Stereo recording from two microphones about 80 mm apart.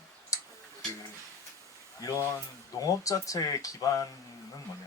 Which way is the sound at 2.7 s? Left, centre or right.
Left.